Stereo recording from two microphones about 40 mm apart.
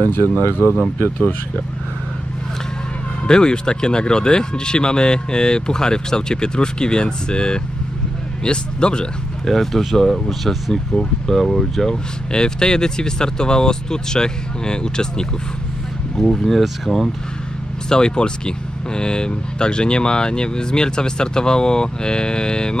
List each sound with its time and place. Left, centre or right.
0.1 s speech: left
3.3 s speech: centre
9.4 s speech: centre
12.3 s speech: centre
16.2 s speech: centre
17.8 s speech: left